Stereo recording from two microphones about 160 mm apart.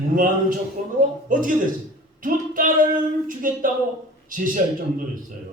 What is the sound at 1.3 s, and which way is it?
A man's voice, 55° right (ahead or behind).